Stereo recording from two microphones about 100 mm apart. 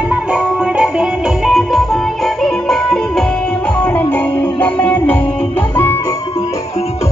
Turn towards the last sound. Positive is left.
turn(degrees=15)  # may be behind; listen again after turning